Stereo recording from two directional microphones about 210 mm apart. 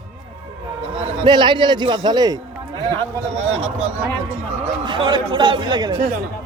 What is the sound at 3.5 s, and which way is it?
A man's voice, 30° right (ahead or behind).